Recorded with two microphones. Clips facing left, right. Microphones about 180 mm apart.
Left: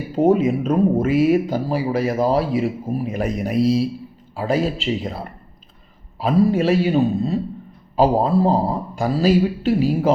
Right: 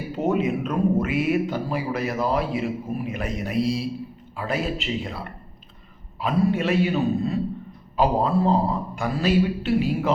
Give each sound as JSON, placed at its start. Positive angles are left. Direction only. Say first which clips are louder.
{"t": 0.2, "sound": "speech", "louder": "left 7 dB", "side_deg": 35}